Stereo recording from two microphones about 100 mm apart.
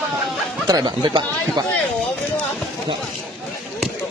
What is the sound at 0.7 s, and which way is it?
Speech, 45° right (ahead or behind).